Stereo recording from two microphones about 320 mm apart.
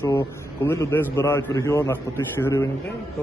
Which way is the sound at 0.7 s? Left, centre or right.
Centre.